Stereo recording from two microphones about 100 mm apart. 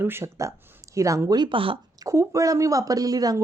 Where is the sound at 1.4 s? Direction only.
60° right (ahead or behind).